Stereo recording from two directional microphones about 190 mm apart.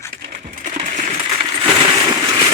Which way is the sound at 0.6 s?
40° right (ahead or behind).